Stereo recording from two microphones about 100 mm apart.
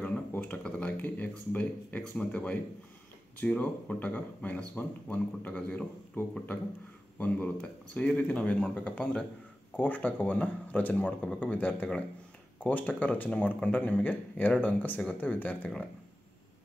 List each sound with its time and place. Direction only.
0.3 s speech: 15° left (ahead or behind)